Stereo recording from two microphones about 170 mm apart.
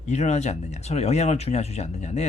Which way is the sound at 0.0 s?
40° left (ahead or behind).